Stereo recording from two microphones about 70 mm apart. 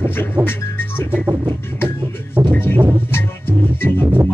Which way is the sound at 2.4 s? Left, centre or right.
Right.